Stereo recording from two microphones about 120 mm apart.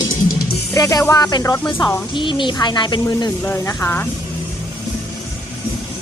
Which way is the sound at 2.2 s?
40° left (ahead or behind).